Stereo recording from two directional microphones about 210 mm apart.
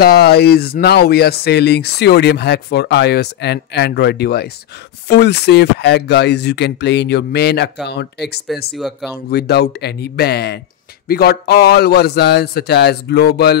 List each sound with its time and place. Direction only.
0.0 s speech: 50° left (ahead or behind)
8.7 s speech: centre (ahead or behind)
9.3 s speech: 50° left (ahead or behind)